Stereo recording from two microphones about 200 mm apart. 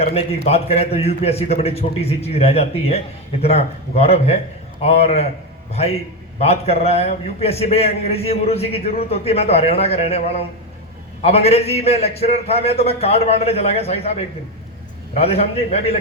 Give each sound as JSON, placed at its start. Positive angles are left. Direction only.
{"t": 0.0, "sound": "a man's voice", "side_deg": 30}
{"t": 6.4, "sound": "a man's voice", "side_deg": 30}